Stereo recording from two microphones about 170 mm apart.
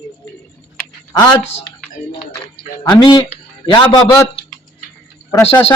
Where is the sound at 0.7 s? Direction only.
10° left (ahead or behind).